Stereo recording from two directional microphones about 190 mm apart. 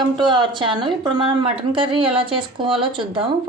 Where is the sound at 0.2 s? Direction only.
25° right (ahead or behind).